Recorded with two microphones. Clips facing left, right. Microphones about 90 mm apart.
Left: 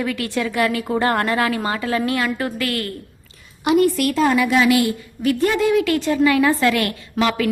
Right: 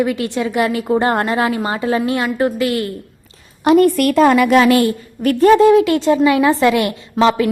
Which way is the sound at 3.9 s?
55° right (ahead or behind).